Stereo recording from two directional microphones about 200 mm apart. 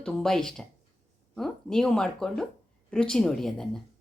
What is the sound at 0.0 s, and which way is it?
Speech, centre (ahead or behind).